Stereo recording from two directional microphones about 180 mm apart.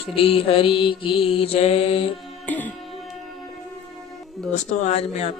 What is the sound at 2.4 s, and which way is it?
Music, 10° left (ahead or behind).